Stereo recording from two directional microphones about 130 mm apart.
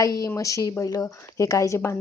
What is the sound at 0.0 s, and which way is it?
Speech, 25° left (ahead or behind).